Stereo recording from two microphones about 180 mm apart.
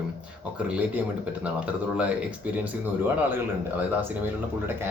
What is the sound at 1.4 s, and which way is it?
Speech, 5° right (ahead or behind).